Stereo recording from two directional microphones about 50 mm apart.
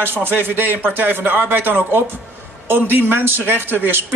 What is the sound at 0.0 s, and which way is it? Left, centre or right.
Speech, right.